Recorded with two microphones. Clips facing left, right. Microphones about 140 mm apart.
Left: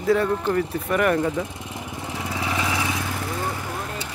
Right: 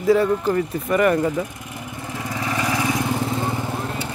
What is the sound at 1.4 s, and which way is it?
Vehicle, 25° left (ahead or behind).